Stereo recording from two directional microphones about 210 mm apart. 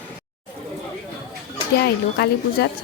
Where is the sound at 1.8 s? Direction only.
50° left (ahead or behind).